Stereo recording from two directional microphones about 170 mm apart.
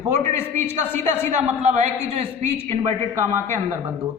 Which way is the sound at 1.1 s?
40° right (ahead or behind).